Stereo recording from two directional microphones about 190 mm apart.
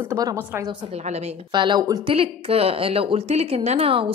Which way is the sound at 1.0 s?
35° right (ahead or behind).